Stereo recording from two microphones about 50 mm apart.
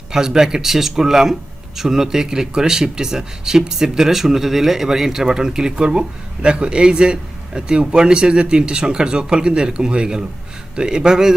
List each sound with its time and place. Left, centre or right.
0.1 s speech: centre